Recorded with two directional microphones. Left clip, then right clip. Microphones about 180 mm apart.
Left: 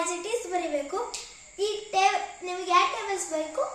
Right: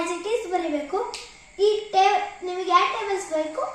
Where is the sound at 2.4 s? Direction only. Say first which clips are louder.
Right 3 dB; 25° left (ahead or behind).